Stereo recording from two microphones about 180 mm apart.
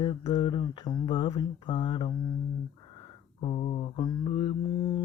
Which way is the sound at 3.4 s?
35° left (ahead or behind).